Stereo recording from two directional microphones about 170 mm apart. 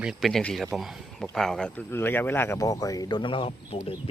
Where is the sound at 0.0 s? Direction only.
Centre (ahead or behind).